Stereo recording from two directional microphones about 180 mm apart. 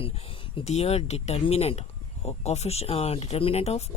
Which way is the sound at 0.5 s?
35° left (ahead or behind).